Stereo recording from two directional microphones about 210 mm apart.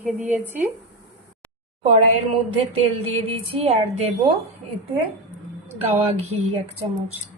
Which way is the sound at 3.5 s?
30° right (ahead or behind).